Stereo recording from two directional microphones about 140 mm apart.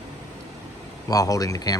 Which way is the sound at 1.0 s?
25° left (ahead or behind).